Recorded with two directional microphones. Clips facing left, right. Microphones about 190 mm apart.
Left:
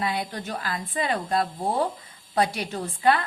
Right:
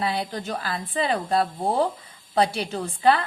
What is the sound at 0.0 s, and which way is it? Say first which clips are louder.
A woman's voice: right 2 dB; 30° right (ahead or behind).